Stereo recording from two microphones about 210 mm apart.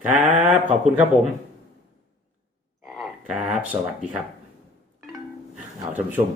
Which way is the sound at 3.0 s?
5° right (ahead or behind).